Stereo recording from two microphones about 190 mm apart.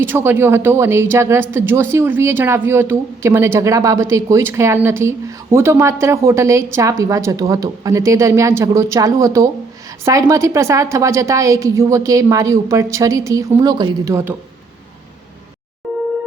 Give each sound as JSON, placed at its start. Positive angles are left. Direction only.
{"t": 0.0, "sound": "speech", "side_deg": -10}